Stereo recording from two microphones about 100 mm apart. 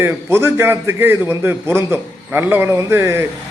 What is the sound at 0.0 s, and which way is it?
A man's voice, 25° right (ahead or behind).